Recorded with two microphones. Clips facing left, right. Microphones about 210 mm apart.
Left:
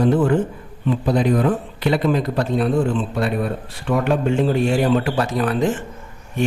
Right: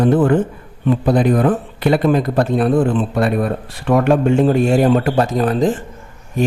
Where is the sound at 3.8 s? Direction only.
60° right (ahead or behind).